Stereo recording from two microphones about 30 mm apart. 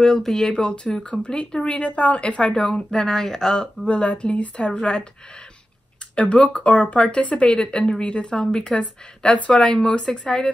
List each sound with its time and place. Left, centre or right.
0.0 s speech: centre
0.4 s speech: left
3.1 s speech: centre
3.5 s speech: left
4.7 s speech: left
6.1 s speech: left
7.5 s speech: left
9.8 s speech: left